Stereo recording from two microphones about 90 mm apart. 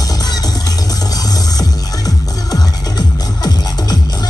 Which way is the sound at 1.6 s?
45° left (ahead or behind).